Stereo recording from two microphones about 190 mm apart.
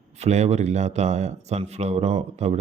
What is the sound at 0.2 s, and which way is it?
Speech, 35° right (ahead or behind).